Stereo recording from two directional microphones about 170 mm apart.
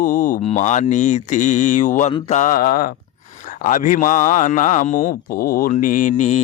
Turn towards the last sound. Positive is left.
turn(degrees=45)  # may be behind; listen again after turning